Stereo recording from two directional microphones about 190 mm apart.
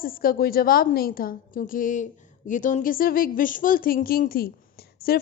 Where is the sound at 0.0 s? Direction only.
50° left (ahead or behind).